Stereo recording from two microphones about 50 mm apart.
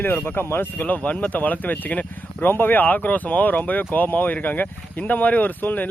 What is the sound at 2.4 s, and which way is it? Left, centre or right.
Speech, left.